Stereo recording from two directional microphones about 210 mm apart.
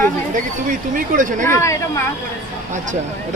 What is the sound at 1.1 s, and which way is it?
Speech, 40° right (ahead or behind).